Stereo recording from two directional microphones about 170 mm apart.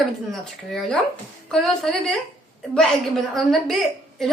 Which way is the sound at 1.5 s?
Centre (ahead or behind).